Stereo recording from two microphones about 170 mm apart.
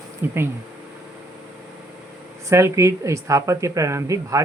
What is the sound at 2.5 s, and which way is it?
Speech, 15° right (ahead or behind).